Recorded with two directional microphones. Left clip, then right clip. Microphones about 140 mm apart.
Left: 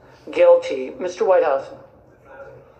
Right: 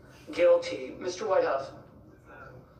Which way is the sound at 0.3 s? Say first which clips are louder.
Left 9 dB; 20° left (ahead or behind).